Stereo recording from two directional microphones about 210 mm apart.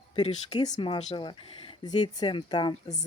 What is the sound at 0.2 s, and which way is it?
Speech, 30° left (ahead or behind).